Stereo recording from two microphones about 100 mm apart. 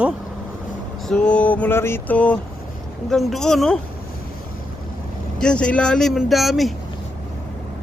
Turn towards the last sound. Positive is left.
turn(degrees=0)  # may be behind; listen again after turning